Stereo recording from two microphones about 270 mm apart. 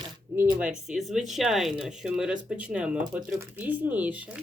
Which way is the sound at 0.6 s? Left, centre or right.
Centre.